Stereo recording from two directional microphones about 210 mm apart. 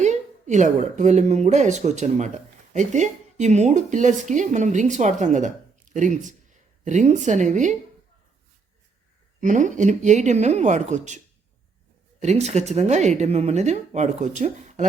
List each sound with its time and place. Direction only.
0.0 s a woman's voice: 35° right (ahead or behind)
9.4 s speech: 35° right (ahead or behind)
12.2 s speech: 30° right (ahead or behind)